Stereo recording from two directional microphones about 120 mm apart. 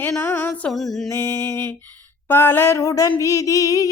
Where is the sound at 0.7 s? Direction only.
Centre (ahead or behind).